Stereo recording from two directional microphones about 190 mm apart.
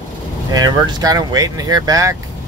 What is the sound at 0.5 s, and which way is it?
Speech, 20° right (ahead or behind).